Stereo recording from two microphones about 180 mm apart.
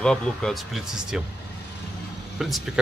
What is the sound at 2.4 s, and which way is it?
Speech, centre (ahead or behind).